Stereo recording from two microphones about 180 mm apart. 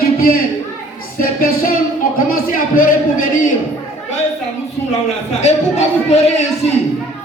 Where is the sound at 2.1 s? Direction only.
50° left (ahead or behind).